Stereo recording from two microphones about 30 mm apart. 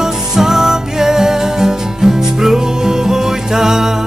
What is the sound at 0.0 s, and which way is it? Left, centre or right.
Music, centre.